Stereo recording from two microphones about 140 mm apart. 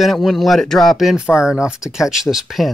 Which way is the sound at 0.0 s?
Centre (ahead or behind).